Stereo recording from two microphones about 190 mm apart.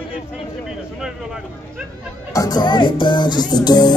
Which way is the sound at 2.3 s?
20° left (ahead or behind).